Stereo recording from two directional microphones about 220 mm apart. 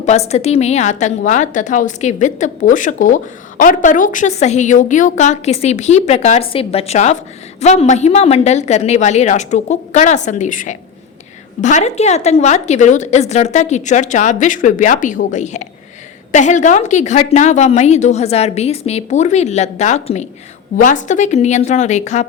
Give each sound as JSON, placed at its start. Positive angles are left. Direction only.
{"t": 0.0, "sound": "a woman's voice", "side_deg": 30}